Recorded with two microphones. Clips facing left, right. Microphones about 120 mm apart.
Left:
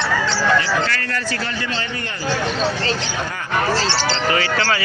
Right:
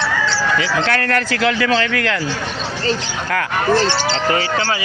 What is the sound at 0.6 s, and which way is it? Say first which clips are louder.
Speech: right 2 dB; 70° right (ahead or behind).